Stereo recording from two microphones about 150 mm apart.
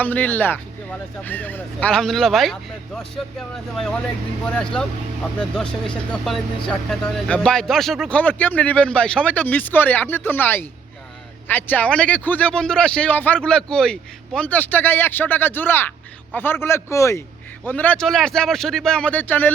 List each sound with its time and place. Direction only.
0.0 s speech: 10° left (ahead or behind)